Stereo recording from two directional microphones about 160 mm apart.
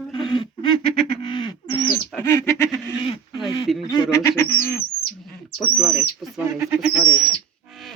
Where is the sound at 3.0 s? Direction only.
35° left (ahead or behind).